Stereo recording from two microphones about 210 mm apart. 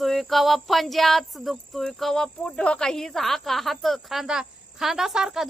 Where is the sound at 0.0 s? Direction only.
Centre (ahead or behind).